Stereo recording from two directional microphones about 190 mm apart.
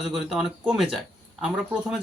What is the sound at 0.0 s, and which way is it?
Speech, centre (ahead or behind).